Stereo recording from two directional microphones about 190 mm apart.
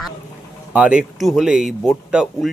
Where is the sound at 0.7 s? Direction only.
5° right (ahead or behind).